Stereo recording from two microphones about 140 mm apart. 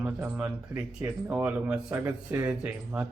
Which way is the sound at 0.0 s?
15° right (ahead or behind).